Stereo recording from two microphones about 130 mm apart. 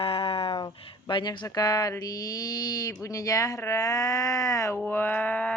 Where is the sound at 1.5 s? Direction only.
30° left (ahead or behind).